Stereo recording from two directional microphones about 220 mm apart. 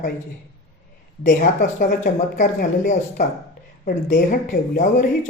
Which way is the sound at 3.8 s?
35° left (ahead or behind).